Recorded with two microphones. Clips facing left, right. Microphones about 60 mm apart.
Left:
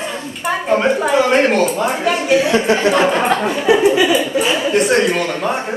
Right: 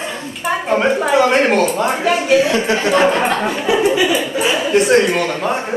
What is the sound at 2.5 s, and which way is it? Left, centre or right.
Speech, left.